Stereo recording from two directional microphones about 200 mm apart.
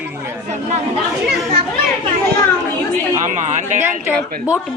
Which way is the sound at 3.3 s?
40° right (ahead or behind).